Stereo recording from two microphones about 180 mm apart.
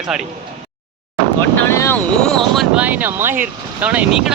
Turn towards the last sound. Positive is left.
turn(degrees=-5)  # may be behind; listen again after turning